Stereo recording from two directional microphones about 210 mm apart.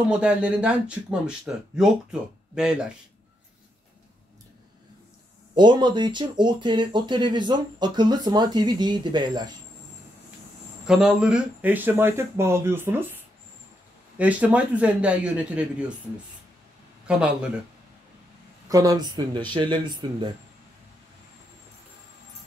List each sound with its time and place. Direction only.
0.1 s speech: 5° right (ahead or behind)
5.5 s speech: 20° right (ahead or behind)
10.9 s speech: 5° right (ahead or behind)
17.1 s speech: 5° right (ahead or behind)
18.7 s speech: 15° right (ahead or behind)